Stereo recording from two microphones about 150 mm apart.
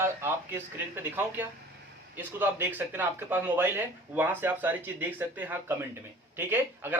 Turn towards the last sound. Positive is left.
turn(degrees=-15)  # may be behind; listen again after turning